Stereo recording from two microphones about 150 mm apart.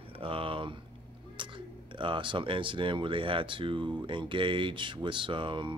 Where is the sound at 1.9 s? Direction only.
35° right (ahead or behind).